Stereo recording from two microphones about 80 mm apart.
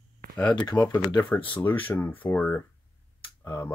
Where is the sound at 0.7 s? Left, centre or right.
Left.